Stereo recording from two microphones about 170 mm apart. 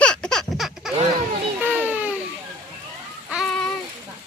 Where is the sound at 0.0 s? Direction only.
5° left (ahead or behind).